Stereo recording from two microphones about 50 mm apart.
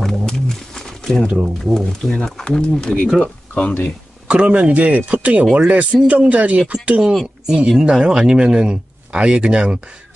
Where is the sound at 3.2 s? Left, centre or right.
Left.